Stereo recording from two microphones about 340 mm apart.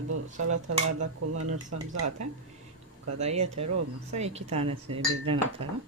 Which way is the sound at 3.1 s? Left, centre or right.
Centre.